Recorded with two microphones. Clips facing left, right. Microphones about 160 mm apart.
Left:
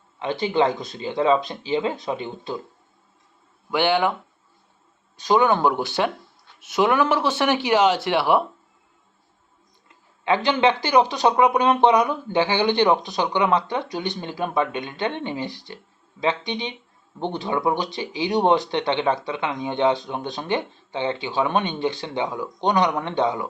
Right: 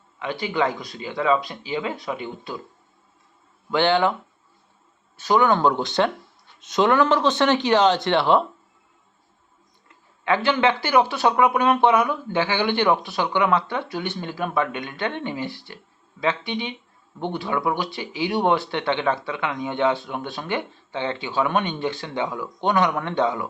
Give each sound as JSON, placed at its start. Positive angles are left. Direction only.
{"t": 0.2, "sound": "speech", "side_deg": 25}
{"t": 3.7, "sound": "speech", "side_deg": 15}
{"t": 5.1, "sound": "speech", "side_deg": 15}
{"t": 10.2, "sound": "speech", "side_deg": 20}